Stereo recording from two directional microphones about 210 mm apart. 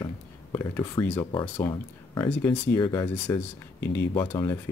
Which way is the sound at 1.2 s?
20° left (ahead or behind).